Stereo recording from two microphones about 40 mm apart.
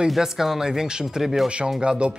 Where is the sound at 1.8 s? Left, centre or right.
Right.